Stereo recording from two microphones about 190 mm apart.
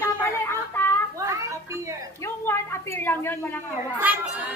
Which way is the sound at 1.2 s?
15° right (ahead or behind).